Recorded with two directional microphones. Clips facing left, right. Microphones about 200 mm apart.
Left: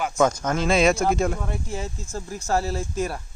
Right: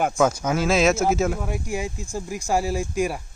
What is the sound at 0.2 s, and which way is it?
Speech, 10° right (ahead or behind).